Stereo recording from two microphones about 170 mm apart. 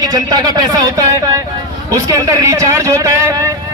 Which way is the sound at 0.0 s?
20° right (ahead or behind).